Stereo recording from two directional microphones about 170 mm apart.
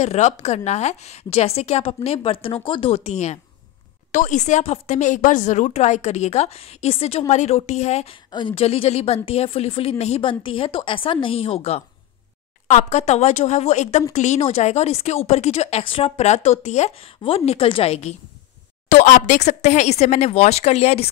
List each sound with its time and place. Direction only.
0.0 s a woman's voice: 40° left (ahead or behind)
18.9 s a woman's voice: 50° left (ahead or behind)